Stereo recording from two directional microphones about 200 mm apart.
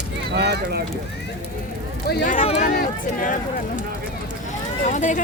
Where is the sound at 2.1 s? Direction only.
45° left (ahead or behind).